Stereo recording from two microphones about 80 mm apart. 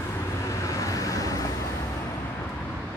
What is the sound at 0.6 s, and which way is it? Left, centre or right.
Vehicle, left.